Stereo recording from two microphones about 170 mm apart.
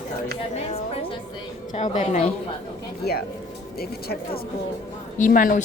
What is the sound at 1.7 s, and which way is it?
Speech, 35° left (ahead or behind).